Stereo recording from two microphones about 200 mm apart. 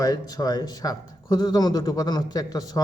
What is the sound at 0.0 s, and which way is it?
A man's voice, 20° left (ahead or behind).